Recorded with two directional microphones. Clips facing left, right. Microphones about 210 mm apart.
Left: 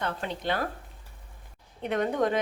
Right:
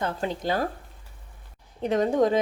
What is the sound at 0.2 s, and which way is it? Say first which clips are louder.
Speech: right 4 dB; 35° right (ahead or behind).